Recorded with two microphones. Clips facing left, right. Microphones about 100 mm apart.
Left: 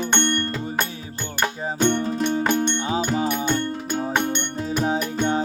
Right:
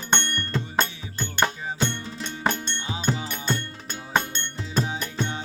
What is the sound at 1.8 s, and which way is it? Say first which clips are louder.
Music: left 11 dB; 50° left (ahead or behind).